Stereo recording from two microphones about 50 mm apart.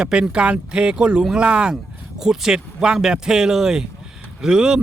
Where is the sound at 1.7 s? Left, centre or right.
Centre.